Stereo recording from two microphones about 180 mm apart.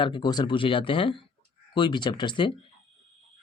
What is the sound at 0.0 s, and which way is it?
Speech, 25° left (ahead or behind).